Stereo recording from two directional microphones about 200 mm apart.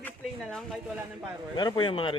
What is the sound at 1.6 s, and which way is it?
Speech, 20° left (ahead or behind).